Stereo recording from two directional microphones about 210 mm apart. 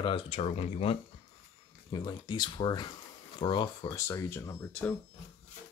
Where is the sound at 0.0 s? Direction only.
25° left (ahead or behind).